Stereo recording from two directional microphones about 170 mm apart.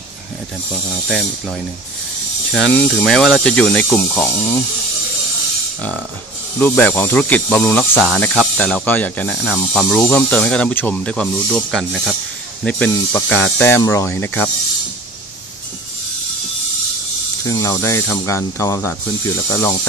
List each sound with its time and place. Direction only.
2.5 s speech: 5° left (ahead or behind)
6.6 s speech: 10° left (ahead or behind)
7.9 s speech: centre (ahead or behind)
17.5 s speech: 15° left (ahead or behind)